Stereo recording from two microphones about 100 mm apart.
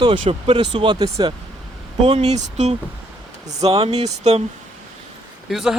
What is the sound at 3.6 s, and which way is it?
Speech, 85° right.